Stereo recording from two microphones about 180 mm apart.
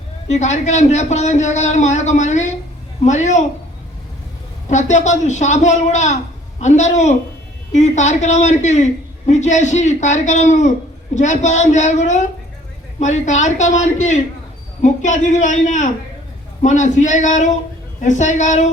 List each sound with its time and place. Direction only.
0.3 s a man's voice: 40° left (ahead or behind)
4.7 s a man's voice: 40° left (ahead or behind)